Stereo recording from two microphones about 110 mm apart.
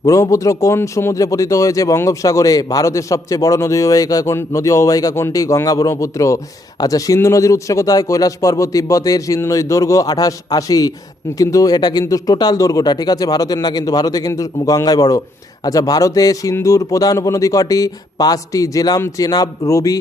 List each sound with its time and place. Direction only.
0.0 s speech: 30° left (ahead or behind)